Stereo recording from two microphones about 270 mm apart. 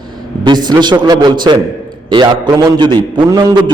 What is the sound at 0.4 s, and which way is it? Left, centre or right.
A man's voice, centre.